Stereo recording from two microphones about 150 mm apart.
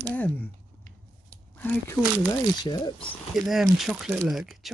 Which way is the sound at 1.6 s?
10° left (ahead or behind).